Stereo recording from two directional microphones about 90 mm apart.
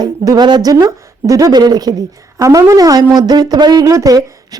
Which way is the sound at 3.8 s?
40° right (ahead or behind).